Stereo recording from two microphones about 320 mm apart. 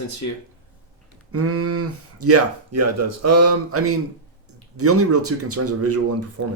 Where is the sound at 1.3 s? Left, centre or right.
Right.